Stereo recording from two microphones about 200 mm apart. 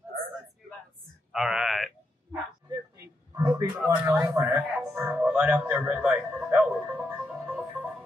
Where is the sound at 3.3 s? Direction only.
10° right (ahead or behind).